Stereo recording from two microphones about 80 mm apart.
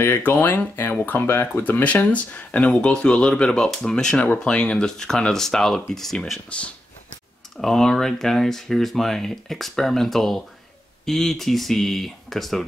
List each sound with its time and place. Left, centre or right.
0.0 s speech: left; by 6.4 s centre
7.6 s speech: centre